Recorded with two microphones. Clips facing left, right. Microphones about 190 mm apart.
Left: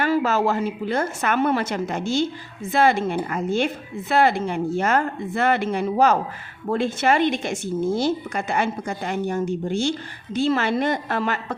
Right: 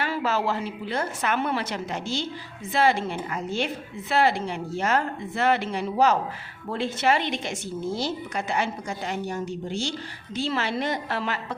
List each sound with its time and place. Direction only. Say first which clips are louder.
0.0 s a woman's voice: left 6 dB; 45° left (ahead or behind)